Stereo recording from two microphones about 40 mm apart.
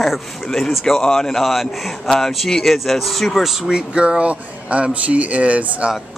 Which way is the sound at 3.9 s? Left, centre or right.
Right.